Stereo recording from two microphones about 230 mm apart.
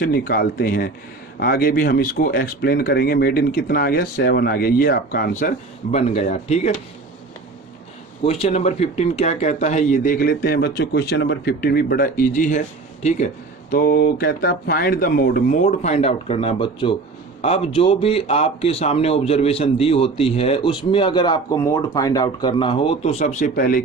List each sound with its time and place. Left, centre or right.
0.0 s speech: left
8.2 s speech: left